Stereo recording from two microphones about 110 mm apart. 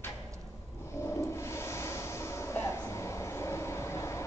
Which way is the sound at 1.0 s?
25° left (ahead or behind).